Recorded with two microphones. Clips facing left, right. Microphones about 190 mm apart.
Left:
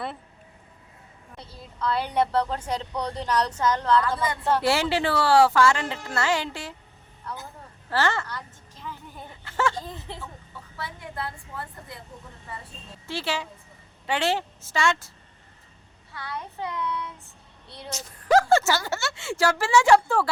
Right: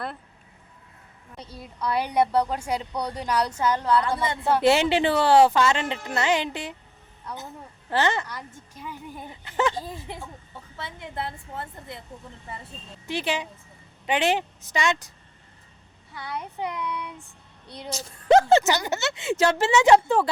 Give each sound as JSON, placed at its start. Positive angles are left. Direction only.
{"t": 1.4, "sound": "a woman's voice", "side_deg": -15}
{"t": 4.2, "sound": "speech", "side_deg": -25}
{"t": 7.9, "sound": "a woman's voice", "side_deg": -20}
{"t": 13.1, "sound": "a woman's voice", "side_deg": -20}
{"t": 16.1, "sound": "a woman's voice", "side_deg": -15}